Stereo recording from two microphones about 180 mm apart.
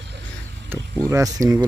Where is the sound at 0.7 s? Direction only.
15° right (ahead or behind).